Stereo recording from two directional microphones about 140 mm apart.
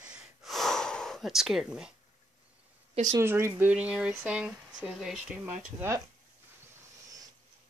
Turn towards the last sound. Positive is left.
turn(degrees=-20)  # may be behind; listen again after turning